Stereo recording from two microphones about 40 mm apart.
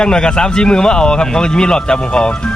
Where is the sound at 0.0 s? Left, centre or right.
Left.